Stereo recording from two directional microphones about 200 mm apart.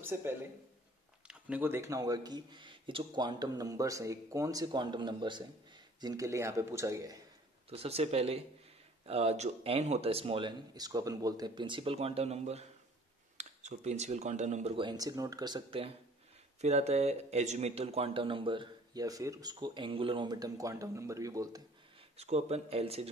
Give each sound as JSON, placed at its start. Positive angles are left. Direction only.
{"t": 0.0, "sound": "speech", "side_deg": -10}
{"t": 7.7, "sound": "speech", "side_deg": -30}
{"t": 22.1, "sound": "speech", "side_deg": -30}